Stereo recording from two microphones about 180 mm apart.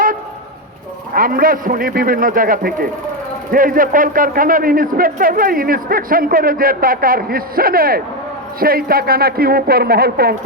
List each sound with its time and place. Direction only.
1.1 s a man's voice: 55° right (ahead or behind)